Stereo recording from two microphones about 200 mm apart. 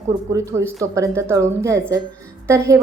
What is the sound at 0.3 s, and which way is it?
Speech, 15° right (ahead or behind).